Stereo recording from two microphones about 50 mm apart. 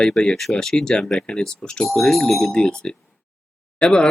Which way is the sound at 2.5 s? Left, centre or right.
Centre.